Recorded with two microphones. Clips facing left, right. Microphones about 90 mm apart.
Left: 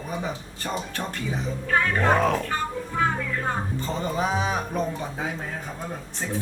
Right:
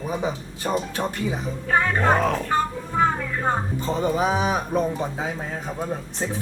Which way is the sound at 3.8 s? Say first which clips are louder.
Right 5 dB; 15° right (ahead or behind).